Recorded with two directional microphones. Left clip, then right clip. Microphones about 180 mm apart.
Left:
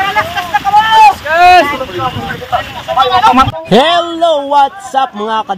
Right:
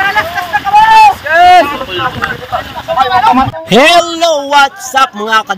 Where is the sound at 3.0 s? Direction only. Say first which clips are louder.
Left 1 dB; centre (ahead or behind).